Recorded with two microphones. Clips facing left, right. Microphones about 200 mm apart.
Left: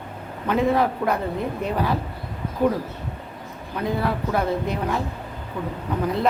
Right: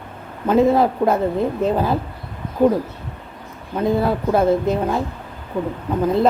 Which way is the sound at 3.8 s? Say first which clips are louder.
Right 6 dB; 25° right (ahead or behind).